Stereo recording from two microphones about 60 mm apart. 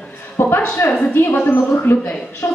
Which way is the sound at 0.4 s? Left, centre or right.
Left.